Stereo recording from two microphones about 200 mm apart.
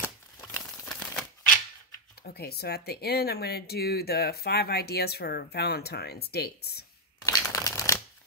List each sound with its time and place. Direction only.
0.8 s typewriter: 5° left (ahead or behind)
2.2 s speech: 50° left (ahead or behind)
7.2 s shuffling cards: 15° left (ahead or behind)